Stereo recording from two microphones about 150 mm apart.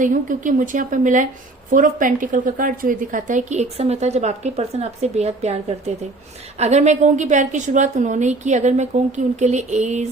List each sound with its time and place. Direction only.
0.0 s a woman's voice: 60° right (ahead or behind)